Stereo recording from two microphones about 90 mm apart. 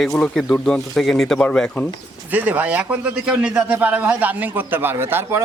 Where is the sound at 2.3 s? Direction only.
20° right (ahead or behind).